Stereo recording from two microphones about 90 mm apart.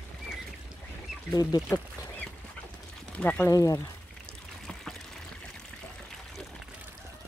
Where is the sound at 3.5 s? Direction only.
40° left (ahead or behind).